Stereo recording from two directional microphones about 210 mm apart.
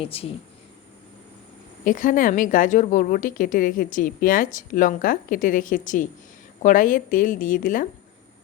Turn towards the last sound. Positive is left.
turn(degrees=40)  # may be behind; listen again after turning